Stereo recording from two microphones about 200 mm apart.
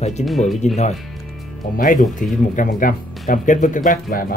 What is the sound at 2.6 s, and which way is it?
Speech, 45° left (ahead or behind).